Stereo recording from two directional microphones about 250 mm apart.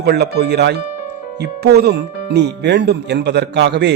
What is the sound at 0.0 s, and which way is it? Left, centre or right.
Speech, right.